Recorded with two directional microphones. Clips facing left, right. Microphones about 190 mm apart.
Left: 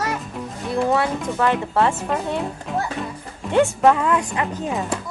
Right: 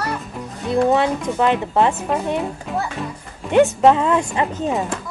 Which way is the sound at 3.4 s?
20° right (ahead or behind).